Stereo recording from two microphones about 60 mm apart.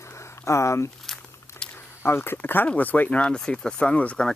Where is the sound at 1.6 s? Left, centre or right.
Left.